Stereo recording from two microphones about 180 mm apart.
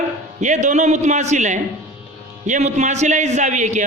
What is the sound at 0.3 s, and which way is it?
A man's voice, 40° right (ahead or behind).